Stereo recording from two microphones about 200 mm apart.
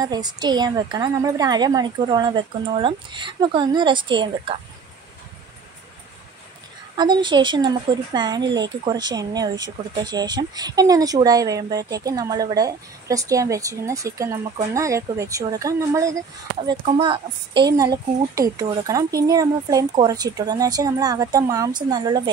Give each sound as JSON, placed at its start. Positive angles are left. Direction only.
{"t": 0.0, "sound": "a woman's voice", "side_deg": -20}
{"t": 7.0, "sound": "a woman's voice", "side_deg": -20}